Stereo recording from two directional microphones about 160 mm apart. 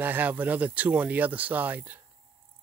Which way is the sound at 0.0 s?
10° right (ahead or behind).